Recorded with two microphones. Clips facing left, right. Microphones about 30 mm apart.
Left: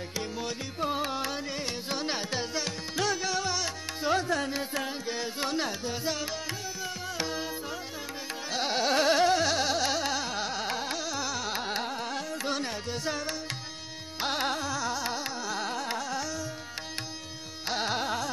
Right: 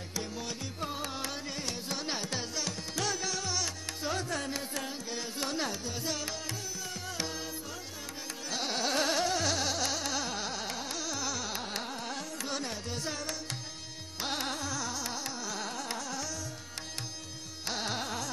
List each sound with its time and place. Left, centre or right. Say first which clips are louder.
0.1 s music: left 2 dB; left
8.5 s carnatic music: left 5 dB; centre
12.4 s music: left 4 dB; centre
14.2 s carnatic music: left 5 dB; centre
17.6 s classical music: left 5 dB; centre